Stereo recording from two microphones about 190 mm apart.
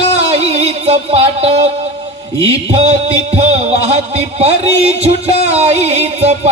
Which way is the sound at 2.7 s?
30° right (ahead or behind).